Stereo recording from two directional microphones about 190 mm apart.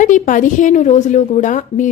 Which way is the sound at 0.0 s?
40° left (ahead or behind).